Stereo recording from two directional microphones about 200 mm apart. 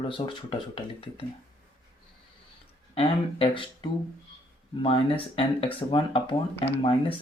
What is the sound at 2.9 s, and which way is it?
Speech, 30° left (ahead or behind).